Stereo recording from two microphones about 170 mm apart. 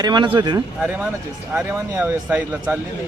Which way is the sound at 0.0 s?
25° right (ahead or behind).